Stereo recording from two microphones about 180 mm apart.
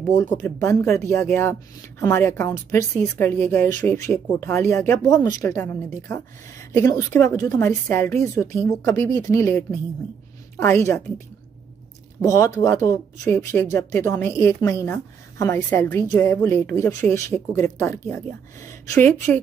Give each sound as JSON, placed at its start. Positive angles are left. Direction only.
{"t": 0.2, "sound": "speech", "side_deg": 15}
{"t": 12.2, "sound": "speech", "side_deg": 15}